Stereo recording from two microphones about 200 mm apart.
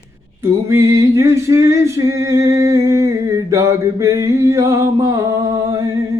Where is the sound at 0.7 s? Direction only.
15° right (ahead or behind).